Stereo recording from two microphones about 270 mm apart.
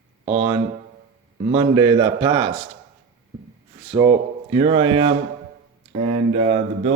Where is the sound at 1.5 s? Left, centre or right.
Centre.